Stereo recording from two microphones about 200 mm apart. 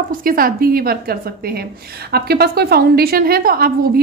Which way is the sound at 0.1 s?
45° right (ahead or behind).